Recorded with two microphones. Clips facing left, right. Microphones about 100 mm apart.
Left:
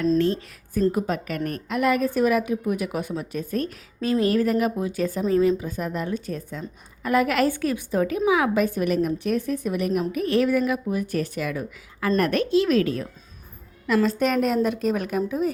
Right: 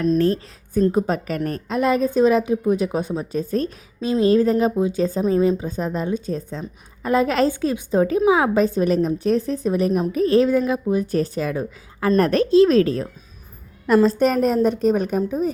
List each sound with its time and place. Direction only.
0.2 s a woman's voice: 40° right (ahead or behind)
0.7 s a woman's voice: 30° right (ahead or behind)